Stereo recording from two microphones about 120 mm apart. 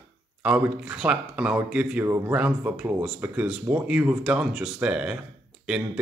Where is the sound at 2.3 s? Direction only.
10° right (ahead or behind).